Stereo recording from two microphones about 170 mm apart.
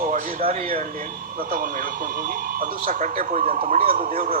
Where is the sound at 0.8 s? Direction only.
55° right (ahead or behind).